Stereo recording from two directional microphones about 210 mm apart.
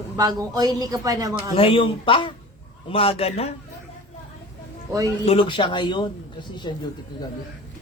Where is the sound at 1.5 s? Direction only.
25° left (ahead or behind).